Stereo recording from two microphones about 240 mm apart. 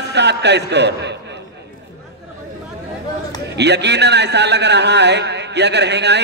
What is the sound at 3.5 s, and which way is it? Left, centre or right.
A man's voice, right.